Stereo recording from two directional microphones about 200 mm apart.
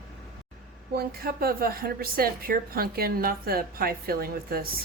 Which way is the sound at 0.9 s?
50° right (ahead or behind).